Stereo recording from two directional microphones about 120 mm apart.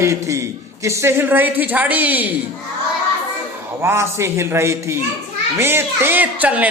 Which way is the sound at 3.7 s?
20° right (ahead or behind).